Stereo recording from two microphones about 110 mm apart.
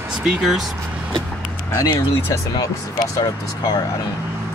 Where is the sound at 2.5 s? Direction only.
35° left (ahead or behind).